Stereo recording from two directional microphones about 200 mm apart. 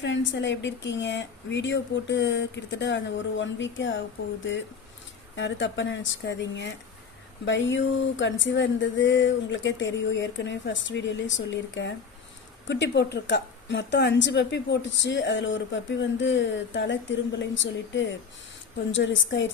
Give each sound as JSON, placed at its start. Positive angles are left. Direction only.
{"t": 0.0, "sound": "a woman's voice", "side_deg": 60}
{"t": 5.4, "sound": "a woman's voice", "side_deg": 65}